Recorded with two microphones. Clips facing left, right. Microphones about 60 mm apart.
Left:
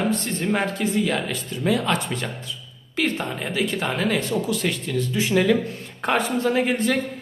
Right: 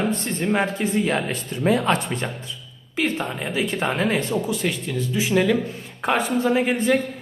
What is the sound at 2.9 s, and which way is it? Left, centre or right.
Speech, centre.